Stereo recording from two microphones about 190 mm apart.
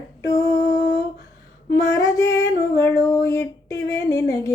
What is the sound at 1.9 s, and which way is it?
Music, 20° left (ahead or behind).